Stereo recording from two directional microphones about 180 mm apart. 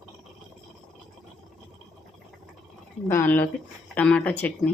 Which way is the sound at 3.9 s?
5° left (ahead or behind).